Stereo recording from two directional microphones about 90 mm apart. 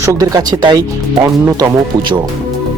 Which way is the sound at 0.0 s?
40° right (ahead or behind).